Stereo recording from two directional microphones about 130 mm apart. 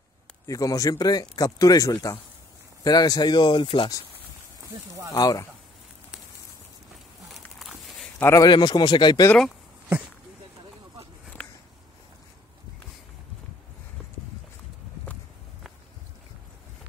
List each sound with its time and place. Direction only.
0.5 s speech: 25° left (ahead or behind)
4.6 s speech: 25° right (ahead or behind)
5.1 s speech: 25° left (ahead or behind)
7.3 s a sound: centre (ahead or behind)
8.2 s a man's voice: 20° left (ahead or behind)
8.5 s speech: 35° left (ahead or behind)
11.4 s a sound: 10° left (ahead or behind)